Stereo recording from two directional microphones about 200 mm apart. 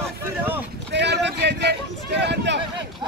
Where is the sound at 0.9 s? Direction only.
60° right (ahead or behind).